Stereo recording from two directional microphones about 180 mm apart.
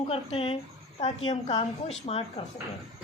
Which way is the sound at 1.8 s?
35° left (ahead or behind).